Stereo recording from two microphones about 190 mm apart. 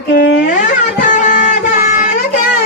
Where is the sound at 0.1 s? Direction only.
60° left (ahead or behind).